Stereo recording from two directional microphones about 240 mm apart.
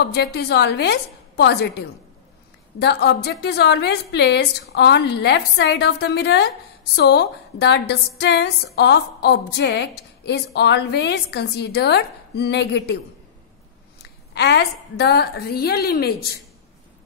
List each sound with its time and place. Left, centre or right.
0.0 s a woman's voice: left
2.8 s a woman's voice: left
14.3 s a woman's voice: left